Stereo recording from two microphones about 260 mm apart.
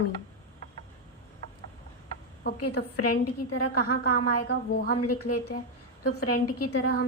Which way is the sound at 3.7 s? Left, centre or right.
Left.